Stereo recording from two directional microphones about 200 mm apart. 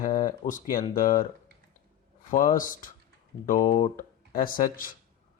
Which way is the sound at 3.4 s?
40° left (ahead or behind).